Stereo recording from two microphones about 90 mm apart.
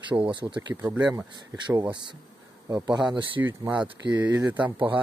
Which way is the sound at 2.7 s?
50° right (ahead or behind).